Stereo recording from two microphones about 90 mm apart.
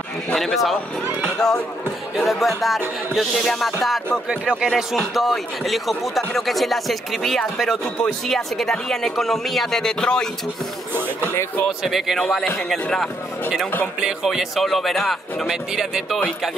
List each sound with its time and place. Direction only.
0.3 s speech: 5° left (ahead or behind)
1.2 s a sound: 5° left (ahead or behind)
2.1 s speech: centre (ahead or behind)
11.0 s speech: 25° right (ahead or behind)
11.8 s speech: centre (ahead or behind)